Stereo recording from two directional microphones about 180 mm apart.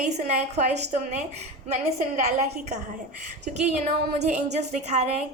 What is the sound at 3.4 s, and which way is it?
A woman's voice, 40° right (ahead or behind).